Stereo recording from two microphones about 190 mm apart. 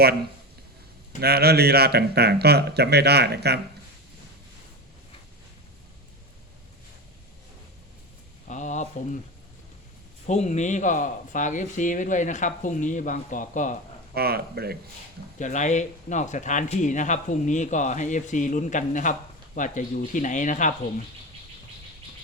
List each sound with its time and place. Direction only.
1.2 s speech: 55° right (ahead or behind)
8.4 s speech: 40° left (ahead or behind)
10.2 s speech: 40° left (ahead or behind)
14.1 s speech: 55° right (ahead or behind)
15.4 s speech: 40° left (ahead or behind)